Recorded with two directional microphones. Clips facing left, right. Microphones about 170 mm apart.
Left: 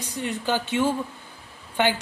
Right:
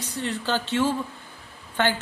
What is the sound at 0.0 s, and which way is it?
Speech, 15° left (ahead or behind).